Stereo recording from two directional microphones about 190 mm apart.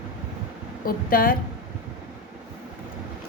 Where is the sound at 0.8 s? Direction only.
50° left (ahead or behind).